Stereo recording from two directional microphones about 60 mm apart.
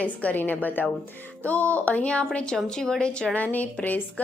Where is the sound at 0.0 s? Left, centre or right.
Left.